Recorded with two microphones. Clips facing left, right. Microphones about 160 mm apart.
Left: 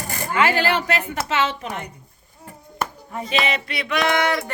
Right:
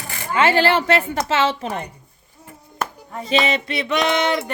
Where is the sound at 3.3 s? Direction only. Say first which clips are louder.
Right 4 dB; 30° right (ahead or behind).